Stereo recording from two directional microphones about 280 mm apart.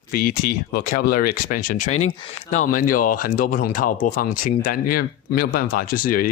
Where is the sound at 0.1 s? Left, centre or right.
Left.